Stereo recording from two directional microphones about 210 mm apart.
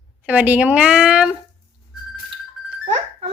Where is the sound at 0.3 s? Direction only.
10° right (ahead or behind).